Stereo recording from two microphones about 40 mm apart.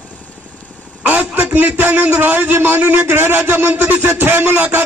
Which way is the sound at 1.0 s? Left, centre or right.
Right.